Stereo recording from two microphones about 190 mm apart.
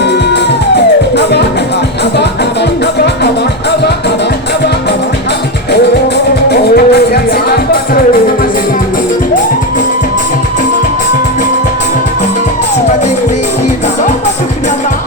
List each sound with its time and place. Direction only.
0.0 s music: 65° left (ahead or behind)
6.5 s music: 55° left (ahead or behind)